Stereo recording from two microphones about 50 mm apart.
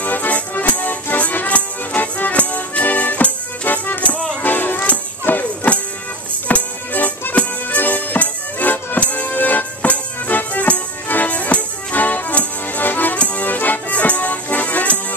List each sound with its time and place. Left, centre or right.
0.0 s music: left